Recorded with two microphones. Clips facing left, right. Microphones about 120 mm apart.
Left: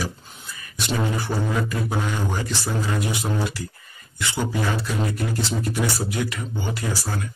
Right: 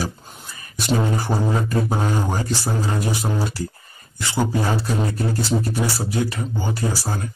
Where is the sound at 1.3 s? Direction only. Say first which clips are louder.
Right 3 dB; 35° right (ahead or behind).